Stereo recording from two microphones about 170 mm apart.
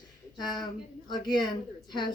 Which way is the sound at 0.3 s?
25° left (ahead or behind).